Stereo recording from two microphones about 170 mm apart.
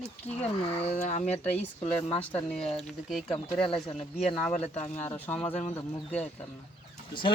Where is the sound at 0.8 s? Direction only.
40° left (ahead or behind).